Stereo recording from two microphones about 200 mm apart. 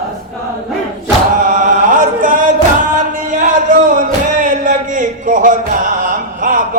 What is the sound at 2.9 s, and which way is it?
Music, 40° right (ahead or behind).